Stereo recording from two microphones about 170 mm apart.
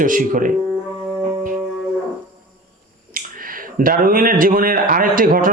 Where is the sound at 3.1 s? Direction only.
55° right (ahead or behind).